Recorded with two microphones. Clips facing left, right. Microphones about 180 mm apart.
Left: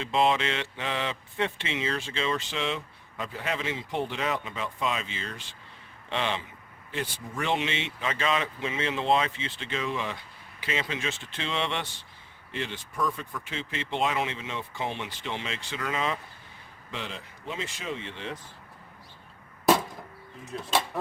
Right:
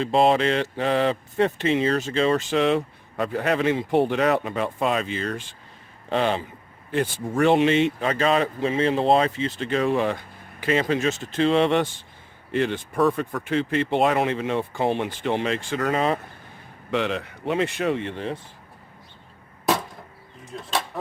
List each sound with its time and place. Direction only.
0.0 s speech: 40° right (ahead or behind)
6.1 s speech: 40° right (ahead or behind)
16.9 s speech: 70° right (ahead or behind); by 18.3 s 55° right (ahead or behind)
20.4 s a sound: centre (ahead or behind)